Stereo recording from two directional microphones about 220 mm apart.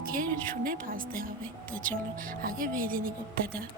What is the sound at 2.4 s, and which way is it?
Speech, 40° right (ahead or behind).